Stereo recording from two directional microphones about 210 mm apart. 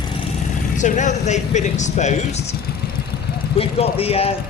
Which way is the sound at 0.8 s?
35° left (ahead or behind).